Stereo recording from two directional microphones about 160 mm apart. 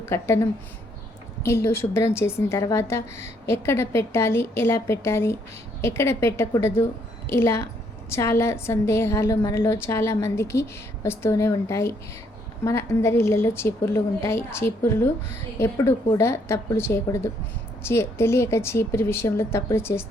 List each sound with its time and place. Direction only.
0.0 s a woman's voice: 15° left (ahead or behind)